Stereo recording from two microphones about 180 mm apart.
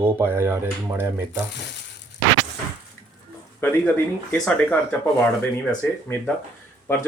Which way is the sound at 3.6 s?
10° left (ahead or behind).